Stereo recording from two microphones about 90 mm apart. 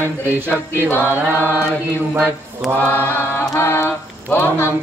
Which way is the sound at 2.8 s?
20° left (ahead or behind).